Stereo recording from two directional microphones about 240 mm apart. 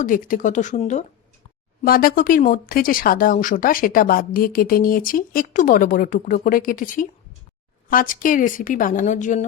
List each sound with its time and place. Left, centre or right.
0.0 s speech: left